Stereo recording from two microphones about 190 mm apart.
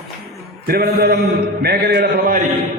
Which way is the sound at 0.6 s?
55° right (ahead or behind).